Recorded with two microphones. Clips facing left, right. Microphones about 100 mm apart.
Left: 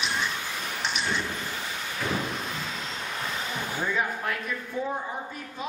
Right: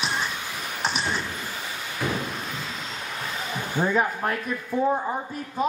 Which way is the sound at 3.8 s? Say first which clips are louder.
Right 6 dB; 40° right (ahead or behind).